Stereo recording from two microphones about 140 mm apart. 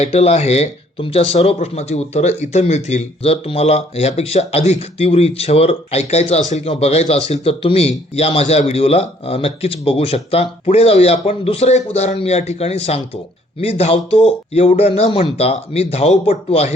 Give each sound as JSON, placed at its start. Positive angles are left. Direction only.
{"t": 0.0, "sound": "speech", "side_deg": 50}